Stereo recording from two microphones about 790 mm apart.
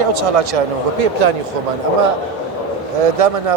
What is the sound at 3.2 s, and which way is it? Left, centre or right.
Speech, right.